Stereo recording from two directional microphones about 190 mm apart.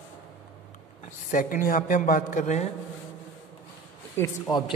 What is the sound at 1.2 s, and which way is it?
Speech, 45° left (ahead or behind).